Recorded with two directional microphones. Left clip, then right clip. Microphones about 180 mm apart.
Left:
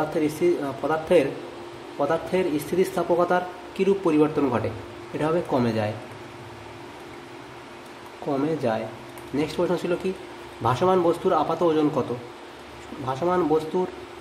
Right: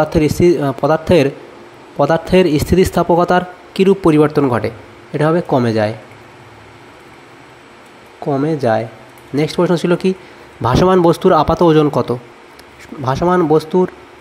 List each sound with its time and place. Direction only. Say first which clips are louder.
0.1 s speech: right 10 dB; 50° right (ahead or behind)
8.3 s speech: right 8 dB; 30° right (ahead or behind)
9.4 s speech: right 10 dB; 45° right (ahead or behind)